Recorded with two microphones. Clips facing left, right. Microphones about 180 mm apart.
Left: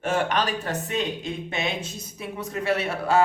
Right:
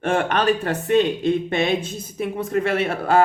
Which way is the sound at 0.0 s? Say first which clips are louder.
Right 4 dB; 55° right (ahead or behind).